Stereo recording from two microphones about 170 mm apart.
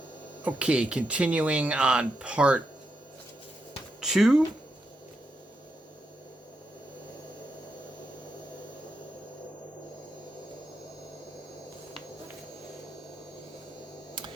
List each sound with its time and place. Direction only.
0.4 s speech: 5° right (ahead or behind)
4.0 s speech: centre (ahead or behind)